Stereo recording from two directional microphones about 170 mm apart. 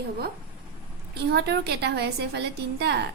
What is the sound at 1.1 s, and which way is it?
A woman's voice, 75° right (ahead or behind).